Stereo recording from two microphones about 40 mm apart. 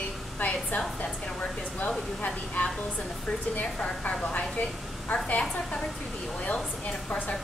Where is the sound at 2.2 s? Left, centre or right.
Left.